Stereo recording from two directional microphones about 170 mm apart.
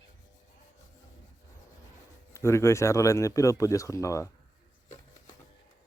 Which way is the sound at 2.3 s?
15° left (ahead or behind).